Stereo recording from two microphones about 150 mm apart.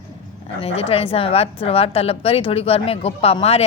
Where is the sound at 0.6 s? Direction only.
40° left (ahead or behind).